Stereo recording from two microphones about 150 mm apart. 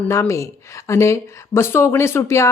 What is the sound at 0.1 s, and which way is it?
Speech, 20° left (ahead or behind).